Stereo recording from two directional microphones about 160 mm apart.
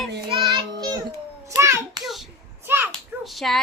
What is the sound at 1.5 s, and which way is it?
Hands, 20° right (ahead or behind).